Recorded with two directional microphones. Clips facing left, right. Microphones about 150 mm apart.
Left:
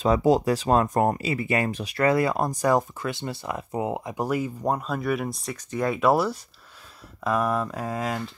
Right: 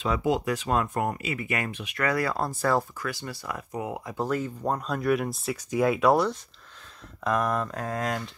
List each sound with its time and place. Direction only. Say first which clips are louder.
0.0 s speech: left 6 dB; 35° left (ahead or behind); by 8.2 s 5° left (ahead or behind)